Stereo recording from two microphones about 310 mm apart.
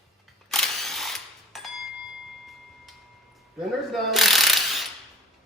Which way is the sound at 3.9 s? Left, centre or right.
Centre.